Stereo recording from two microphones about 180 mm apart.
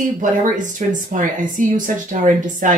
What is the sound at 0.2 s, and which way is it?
Speech, 45° right (ahead or behind).